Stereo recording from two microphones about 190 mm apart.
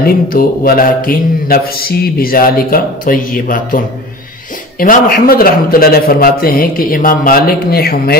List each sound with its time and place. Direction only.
0.0 s mantra: 50° left (ahead or behind)